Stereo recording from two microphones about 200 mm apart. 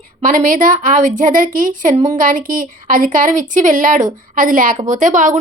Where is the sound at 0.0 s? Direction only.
40° right (ahead or behind).